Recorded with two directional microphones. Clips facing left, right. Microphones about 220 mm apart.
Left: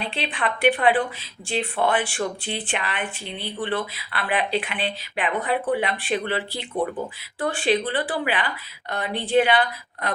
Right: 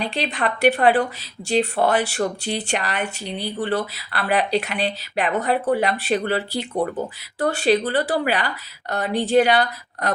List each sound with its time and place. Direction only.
0.0 s speech: 40° right (ahead or behind)